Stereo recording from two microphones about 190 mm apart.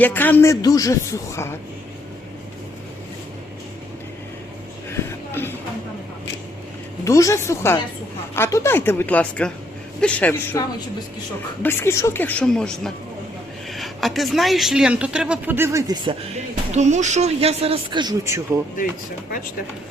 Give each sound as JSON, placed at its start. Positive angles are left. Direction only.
{"t": 0.0, "sound": "a man's voice", "side_deg": 10}
{"t": 4.9, "sound": "a sound", "side_deg": 10}
{"t": 7.0, "sound": "a man's voice", "side_deg": 15}
{"t": 11.6, "sound": "a man's voice", "side_deg": 10}
{"t": 16.7, "sound": "a man's voice", "side_deg": -35}